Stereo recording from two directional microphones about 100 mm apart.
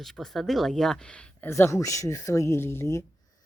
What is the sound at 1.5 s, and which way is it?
Speech, 30° left (ahead or behind).